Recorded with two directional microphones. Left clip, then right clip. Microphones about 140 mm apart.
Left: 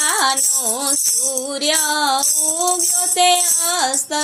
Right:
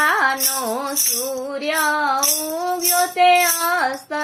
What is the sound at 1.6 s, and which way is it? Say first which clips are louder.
Music: left 1 dB; 20° left (ahead or behind).